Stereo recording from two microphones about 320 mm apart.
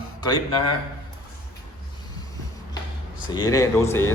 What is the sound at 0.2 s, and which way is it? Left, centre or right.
Speech, centre.